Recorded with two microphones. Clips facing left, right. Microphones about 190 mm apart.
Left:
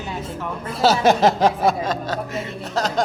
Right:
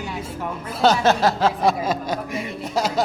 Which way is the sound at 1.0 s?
20° left (ahead or behind).